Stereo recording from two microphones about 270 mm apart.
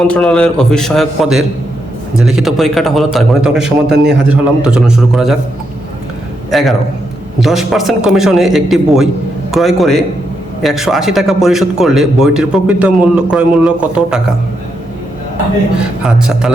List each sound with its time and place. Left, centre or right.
0.1 s a man's voice: centre
3.9 s a man's voice: right
4.3 s a man's voice: centre
6.5 s a man's voice: centre
15.8 s a man's voice: centre